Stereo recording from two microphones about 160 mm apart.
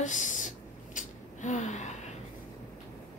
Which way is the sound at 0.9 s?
50° left (ahead or behind).